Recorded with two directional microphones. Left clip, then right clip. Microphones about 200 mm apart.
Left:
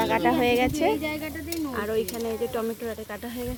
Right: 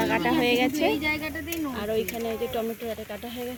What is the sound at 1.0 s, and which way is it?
Speech, 60° right (ahead or behind).